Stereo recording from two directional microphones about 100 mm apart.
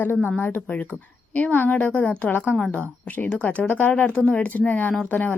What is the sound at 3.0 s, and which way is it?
A woman's voice, 15° left (ahead or behind).